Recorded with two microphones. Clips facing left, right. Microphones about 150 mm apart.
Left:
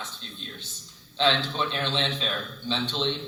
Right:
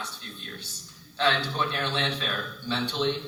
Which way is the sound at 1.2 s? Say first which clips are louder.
Left 1 dB; 20° left (ahead or behind).